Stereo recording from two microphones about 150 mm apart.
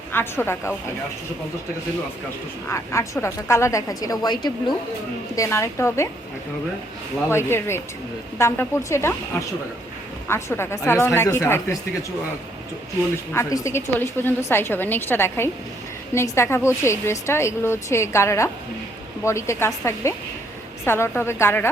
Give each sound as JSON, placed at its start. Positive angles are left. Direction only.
{"t": 0.1, "sound": "a woman's voice", "side_deg": 15}
{"t": 2.6, "sound": "a woman's voice", "side_deg": 20}
{"t": 7.3, "sound": "a woman's voice", "side_deg": 15}
{"t": 10.2, "sound": "a woman's voice", "side_deg": 15}
{"t": 13.3, "sound": "a woman's voice", "side_deg": 20}